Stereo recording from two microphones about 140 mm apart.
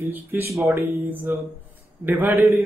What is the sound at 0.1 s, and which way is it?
A man's voice, 15° right (ahead or behind).